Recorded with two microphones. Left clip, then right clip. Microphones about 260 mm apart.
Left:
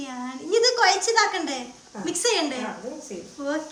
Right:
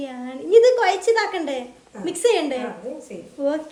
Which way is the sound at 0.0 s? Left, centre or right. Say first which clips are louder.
Right 3 dB; centre.